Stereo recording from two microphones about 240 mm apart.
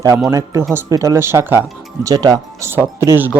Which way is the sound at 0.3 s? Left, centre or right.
Centre.